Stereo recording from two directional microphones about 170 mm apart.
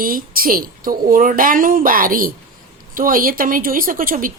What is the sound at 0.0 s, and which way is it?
A woman's voice, 55° right (ahead or behind).